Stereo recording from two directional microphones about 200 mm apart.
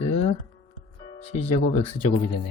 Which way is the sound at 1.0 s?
25° left (ahead or behind).